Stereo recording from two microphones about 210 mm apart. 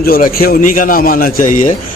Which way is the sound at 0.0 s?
45° left (ahead or behind).